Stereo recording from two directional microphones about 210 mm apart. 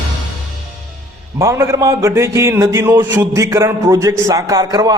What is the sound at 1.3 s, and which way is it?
A man's voice, 15° right (ahead or behind).